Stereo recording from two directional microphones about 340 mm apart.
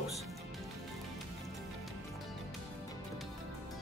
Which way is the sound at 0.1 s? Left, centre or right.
Centre.